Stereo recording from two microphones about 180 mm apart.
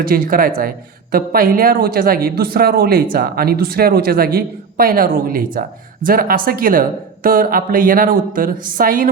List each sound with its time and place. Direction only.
0.1 s speech: 55° right (ahead or behind)